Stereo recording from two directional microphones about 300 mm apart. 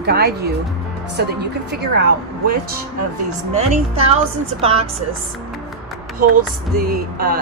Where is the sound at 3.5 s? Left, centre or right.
Right.